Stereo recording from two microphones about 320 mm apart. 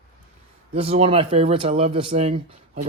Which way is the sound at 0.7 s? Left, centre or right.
Centre.